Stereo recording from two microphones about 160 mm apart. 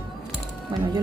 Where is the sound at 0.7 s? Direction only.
30° right (ahead or behind).